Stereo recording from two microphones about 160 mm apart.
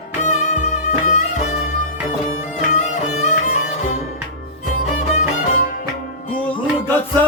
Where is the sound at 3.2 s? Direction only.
50° left (ahead or behind).